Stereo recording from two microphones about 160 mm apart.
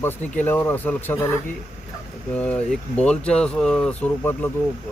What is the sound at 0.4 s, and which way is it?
Speech, 15° left (ahead or behind).